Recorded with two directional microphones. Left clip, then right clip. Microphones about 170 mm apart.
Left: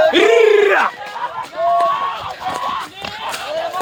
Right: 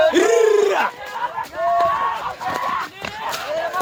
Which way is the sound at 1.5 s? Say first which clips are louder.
Left 3 dB; centre (ahead or behind).